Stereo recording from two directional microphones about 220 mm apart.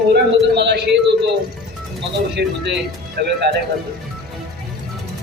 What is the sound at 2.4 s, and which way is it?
Speech, 50° right (ahead or behind).